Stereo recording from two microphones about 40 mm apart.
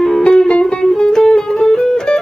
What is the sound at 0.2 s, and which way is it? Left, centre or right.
Music, left.